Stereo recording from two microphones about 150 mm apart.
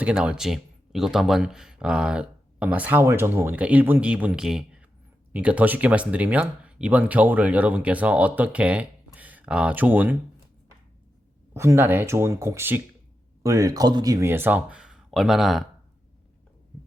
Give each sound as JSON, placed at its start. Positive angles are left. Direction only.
{"t": 0.0, "sound": "speech", "side_deg": -5}
{"t": 11.5, "sound": "speech", "side_deg": -15}